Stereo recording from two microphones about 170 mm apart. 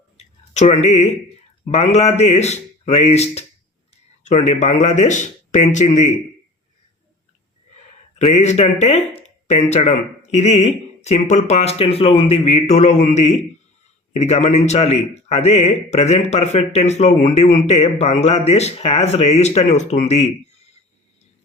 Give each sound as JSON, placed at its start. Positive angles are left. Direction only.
{"t": 0.2, "sound": "a sound", "side_deg": 40}
{"t": 1.7, "sound": "a man's voice", "side_deg": 40}
{"t": 8.2, "sound": "a man's voice", "side_deg": 40}